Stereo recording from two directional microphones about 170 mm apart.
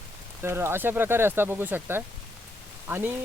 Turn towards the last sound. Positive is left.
turn(degrees=-10)  # may be behind; listen again after turning